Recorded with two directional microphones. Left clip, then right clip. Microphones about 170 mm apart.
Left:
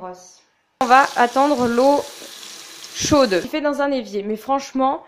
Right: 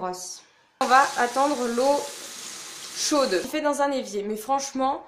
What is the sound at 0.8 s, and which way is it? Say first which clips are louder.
A woman's voice: left 5 dB; 40° left (ahead or behind).